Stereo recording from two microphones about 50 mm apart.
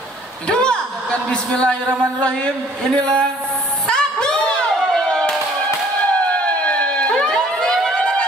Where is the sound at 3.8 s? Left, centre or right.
Centre.